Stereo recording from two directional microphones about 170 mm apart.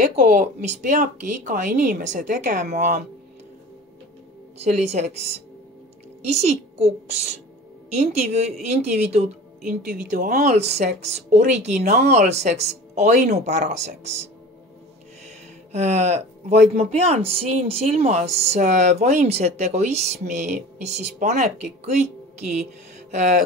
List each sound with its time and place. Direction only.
0.0 s speech: 50° right (ahead or behind)
4.6 s speech: 40° right (ahead or behind)
9.7 s speech: 55° right (ahead or behind)
15.7 s speech: 40° right (ahead or behind)